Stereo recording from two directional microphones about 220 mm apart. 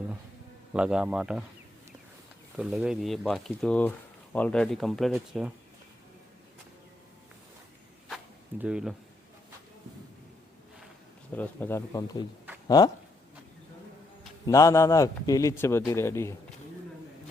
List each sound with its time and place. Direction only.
0.7 s speech: 5° right (ahead or behind)
2.6 s speech: centre (ahead or behind)
8.0 s zipper: centre (ahead or behind)
11.3 s a man's voice: 10° left (ahead or behind)
14.4 s a man's voice: 15° left (ahead or behind)